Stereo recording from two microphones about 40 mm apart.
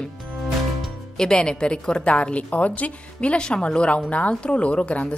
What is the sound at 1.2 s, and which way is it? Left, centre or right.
A woman's voice, centre.